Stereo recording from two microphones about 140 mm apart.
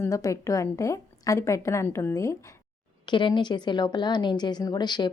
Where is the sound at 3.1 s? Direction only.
35° left (ahead or behind).